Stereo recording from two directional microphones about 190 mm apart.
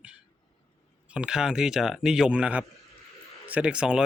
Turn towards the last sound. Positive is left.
turn(degrees=-5)  # may be behind; listen again after turning